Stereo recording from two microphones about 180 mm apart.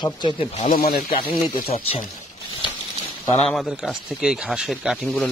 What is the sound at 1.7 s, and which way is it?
Speech, 35° left (ahead or behind).